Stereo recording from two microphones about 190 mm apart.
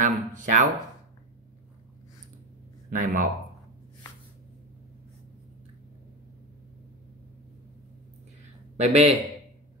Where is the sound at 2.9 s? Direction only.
45° right (ahead or behind).